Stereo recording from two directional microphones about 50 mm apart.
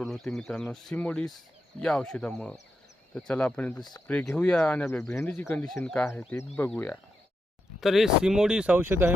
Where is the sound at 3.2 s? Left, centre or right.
Centre.